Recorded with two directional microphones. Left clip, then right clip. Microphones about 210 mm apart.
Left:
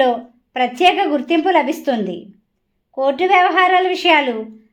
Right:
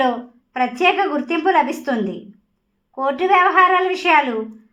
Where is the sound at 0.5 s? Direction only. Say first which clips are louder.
Left 3 dB; 30° left (ahead or behind).